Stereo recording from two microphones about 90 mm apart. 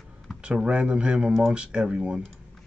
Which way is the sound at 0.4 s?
10° right (ahead or behind).